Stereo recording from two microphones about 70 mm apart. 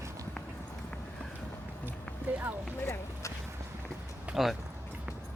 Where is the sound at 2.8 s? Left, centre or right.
Left.